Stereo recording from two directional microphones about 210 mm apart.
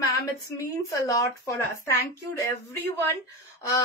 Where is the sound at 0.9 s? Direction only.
15° left (ahead or behind).